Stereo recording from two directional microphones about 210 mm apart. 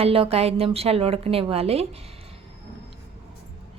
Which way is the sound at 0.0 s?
30° right (ahead or behind).